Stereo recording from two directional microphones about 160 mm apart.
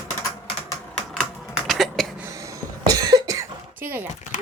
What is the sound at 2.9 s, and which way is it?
Cough, 25° right (ahead or behind).